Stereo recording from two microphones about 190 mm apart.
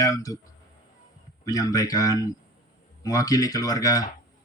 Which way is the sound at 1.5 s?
20° left (ahead or behind).